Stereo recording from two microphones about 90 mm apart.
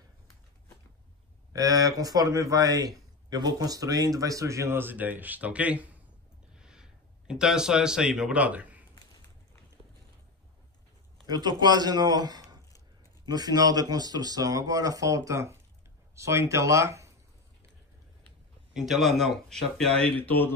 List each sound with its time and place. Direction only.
1.5 s a man's voice: 45° right (ahead or behind); by 8.8 s 15° right (ahead or behind)
11.2 s a man's voice: 50° right (ahead or behind); by 17.1 s 35° right (ahead or behind)
18.7 s speech: 5° right (ahead or behind)
20.2 s speech: 20° left (ahead or behind)